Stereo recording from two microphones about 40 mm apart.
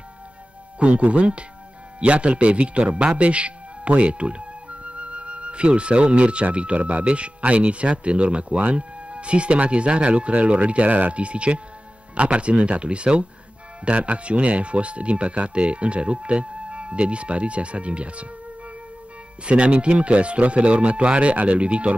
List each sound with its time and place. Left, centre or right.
0.7 s speech: right
3.1 s music: right
6.5 s speech: right
19.4 s speech: right